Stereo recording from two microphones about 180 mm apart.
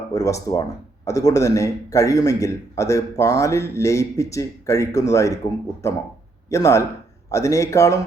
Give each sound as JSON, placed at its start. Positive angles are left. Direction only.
{"t": 0.1, "sound": "a man's voice", "side_deg": 20}